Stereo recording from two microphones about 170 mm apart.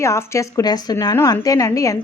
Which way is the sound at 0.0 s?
15° left (ahead or behind).